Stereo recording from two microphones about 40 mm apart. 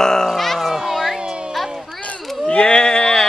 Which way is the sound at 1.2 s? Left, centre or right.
Right.